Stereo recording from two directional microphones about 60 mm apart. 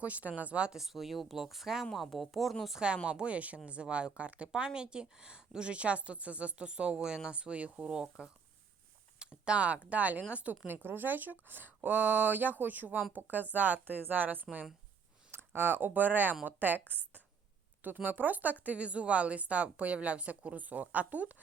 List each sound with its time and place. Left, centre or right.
0.0 s a woman's voice: right
0.8 s speech: centre
2.8 s a woman's voice: centre
10.7 s a woman's voice: right